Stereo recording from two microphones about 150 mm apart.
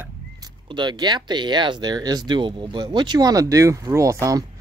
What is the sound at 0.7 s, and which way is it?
Speech, 30° right (ahead or behind).